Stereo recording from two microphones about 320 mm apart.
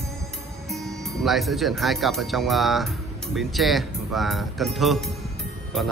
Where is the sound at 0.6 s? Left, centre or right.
Centre.